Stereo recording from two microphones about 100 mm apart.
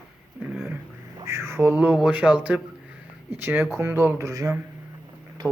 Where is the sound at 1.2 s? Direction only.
30° right (ahead or behind).